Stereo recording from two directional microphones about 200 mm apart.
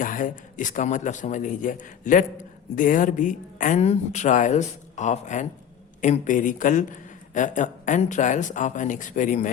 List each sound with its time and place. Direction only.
0.0 s a man's voice: 40° left (ahead or behind)